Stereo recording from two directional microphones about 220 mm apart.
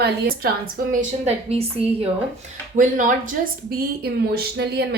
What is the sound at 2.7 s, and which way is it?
A woman's voice, 35° right (ahead or behind).